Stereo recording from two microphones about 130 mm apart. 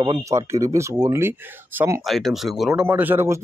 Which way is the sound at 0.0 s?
30° right (ahead or behind).